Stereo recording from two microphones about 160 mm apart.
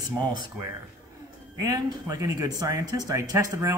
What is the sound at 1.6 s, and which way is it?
Speech, 20° right (ahead or behind).